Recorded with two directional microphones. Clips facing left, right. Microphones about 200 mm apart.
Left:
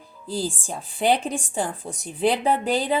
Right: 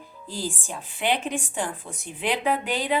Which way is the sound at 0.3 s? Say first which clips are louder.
Left 4 dB; 35° left (ahead or behind).